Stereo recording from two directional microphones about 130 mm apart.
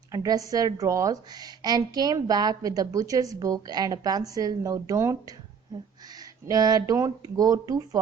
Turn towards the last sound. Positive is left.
turn(degrees=-30)  # may be behind; listen again after turning